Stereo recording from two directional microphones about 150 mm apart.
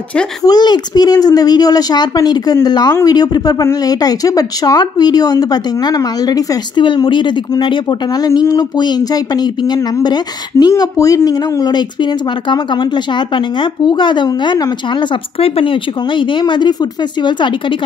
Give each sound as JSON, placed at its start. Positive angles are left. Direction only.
{"t": 0.4, "sound": "a woman's voice", "side_deg": 25}